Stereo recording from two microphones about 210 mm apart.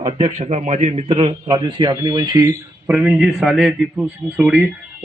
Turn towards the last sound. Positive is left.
turn(degrees=-5)  # may be behind; listen again after turning